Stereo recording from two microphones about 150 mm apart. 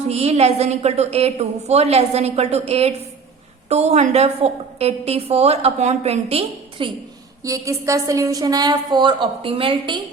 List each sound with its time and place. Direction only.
0.1 s a woman's voice: 45° right (ahead or behind)
7.4 s a woman's voice: 20° right (ahead or behind)